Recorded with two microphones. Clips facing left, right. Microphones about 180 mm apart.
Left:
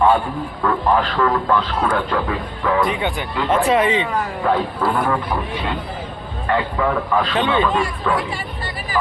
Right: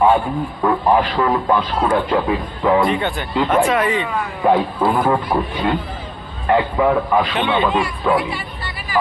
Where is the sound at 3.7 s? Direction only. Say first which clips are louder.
Left 1 dB; 25° left (ahead or behind).